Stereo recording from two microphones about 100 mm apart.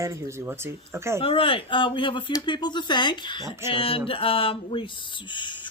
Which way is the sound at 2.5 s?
45° left (ahead or behind).